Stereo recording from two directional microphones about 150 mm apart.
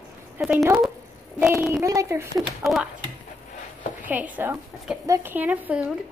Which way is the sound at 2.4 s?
Centre (ahead or behind).